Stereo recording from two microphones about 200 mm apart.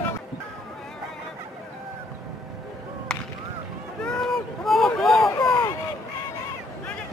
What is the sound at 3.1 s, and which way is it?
Whip, 5° left (ahead or behind).